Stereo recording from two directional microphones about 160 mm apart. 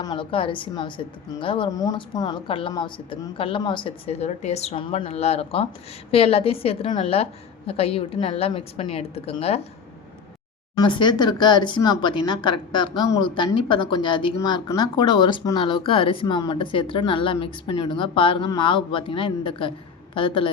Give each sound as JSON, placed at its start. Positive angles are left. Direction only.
{"t": 0.0, "sound": "speech", "side_deg": 30}
{"t": 10.8, "sound": "speech", "side_deg": 30}